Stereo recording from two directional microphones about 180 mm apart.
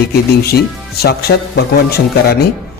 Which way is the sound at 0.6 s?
60° left (ahead or behind).